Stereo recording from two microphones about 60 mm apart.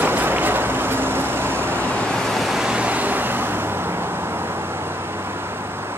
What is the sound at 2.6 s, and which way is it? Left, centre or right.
Vehicle, centre.